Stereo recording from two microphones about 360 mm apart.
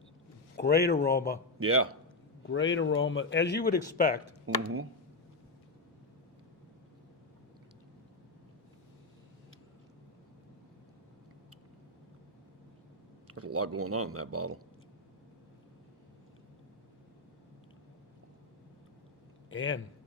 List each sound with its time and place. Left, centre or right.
0.5 s speech: left
1.5 s a man's voice: right
2.5 s speech: left
4.4 s a man's voice: right
13.2 s a man's voice: right
19.5 s a man's voice: left